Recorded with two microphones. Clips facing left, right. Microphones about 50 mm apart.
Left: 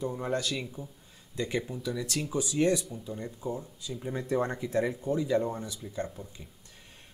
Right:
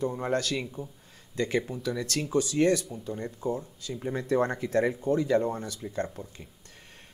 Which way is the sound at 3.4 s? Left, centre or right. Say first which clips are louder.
Right 5 dB; right.